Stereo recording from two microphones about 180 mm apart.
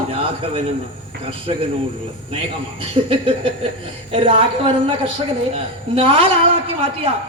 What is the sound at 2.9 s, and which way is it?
A man's voice, 30° right (ahead or behind).